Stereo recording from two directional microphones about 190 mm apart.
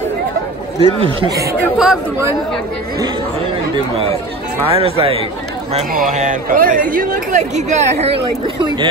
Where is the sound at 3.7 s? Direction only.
30° right (ahead or behind).